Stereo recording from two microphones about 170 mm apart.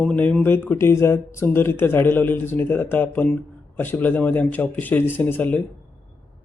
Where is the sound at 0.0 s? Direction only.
5° left (ahead or behind).